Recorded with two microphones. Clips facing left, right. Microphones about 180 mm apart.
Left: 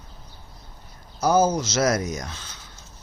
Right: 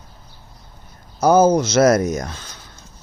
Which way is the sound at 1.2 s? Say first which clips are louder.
Right 6 dB; 55° right (ahead or behind).